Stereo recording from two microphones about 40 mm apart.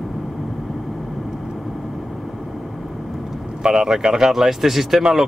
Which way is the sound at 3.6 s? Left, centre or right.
Centre.